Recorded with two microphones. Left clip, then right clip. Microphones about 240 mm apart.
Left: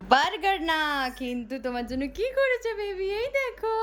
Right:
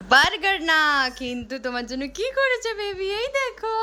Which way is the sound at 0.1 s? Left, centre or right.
Centre.